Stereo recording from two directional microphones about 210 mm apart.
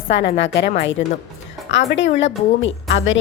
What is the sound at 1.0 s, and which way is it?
Speech, 35° left (ahead or behind).